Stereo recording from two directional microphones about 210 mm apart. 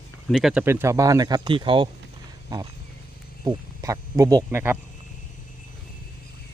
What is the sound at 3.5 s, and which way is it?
Speech, 15° right (ahead or behind).